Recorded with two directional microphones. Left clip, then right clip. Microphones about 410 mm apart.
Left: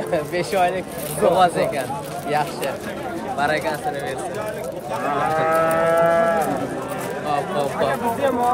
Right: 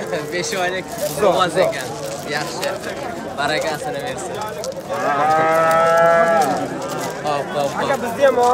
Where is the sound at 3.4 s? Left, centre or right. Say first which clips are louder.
Right 1 dB; centre.